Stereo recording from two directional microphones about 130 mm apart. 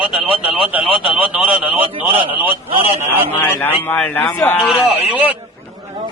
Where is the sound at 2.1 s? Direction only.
40° left (ahead or behind).